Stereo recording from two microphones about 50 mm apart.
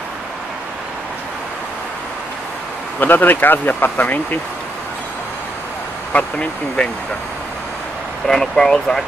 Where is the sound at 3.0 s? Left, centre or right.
Left.